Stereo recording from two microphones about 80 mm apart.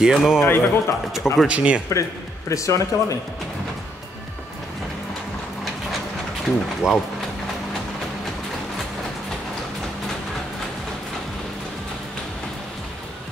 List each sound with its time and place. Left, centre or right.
0.0 s a man's voice: centre
0.4 s a man's voice: left
1.1 s speech: centre
1.5 s a man's voice: centre
2.5 s speech: left
6.4 s speech: centre